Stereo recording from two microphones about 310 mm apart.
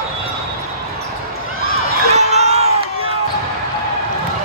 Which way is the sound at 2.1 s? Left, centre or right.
Right.